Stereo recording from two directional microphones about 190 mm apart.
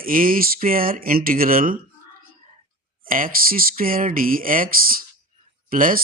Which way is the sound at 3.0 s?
45° right (ahead or behind).